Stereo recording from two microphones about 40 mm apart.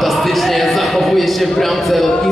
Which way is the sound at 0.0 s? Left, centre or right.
Centre.